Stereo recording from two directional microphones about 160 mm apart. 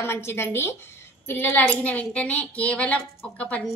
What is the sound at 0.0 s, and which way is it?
A woman's voice, 15° left (ahead or behind).